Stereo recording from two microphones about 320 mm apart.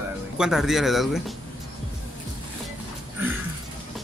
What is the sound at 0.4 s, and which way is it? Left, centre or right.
Speech, centre.